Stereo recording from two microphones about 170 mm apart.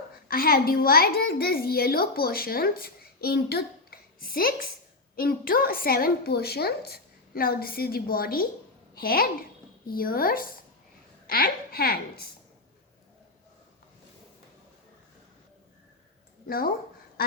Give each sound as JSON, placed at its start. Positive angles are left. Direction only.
{"t": 0.3, "sound": "a child's voice", "side_deg": 60}
{"t": 16.5, "sound": "a child's voice", "side_deg": 60}